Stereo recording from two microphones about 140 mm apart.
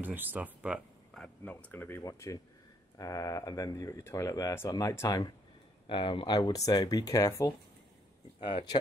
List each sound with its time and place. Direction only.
0.0 s speech: 15° right (ahead or behind)
1.1 s speech: 10° left (ahead or behind)
5.9 s speech: 35° left (ahead or behind)
8.4 s speech: 35° left (ahead or behind)